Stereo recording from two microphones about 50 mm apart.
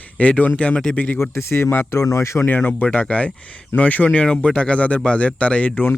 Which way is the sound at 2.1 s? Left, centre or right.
Left.